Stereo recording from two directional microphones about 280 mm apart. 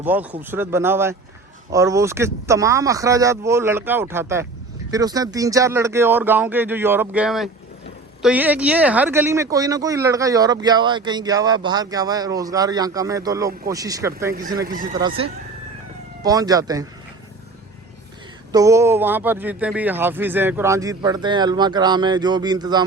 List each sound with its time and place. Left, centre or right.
0.0 s speech: centre
16.2 s speech: centre
18.5 s speech: centre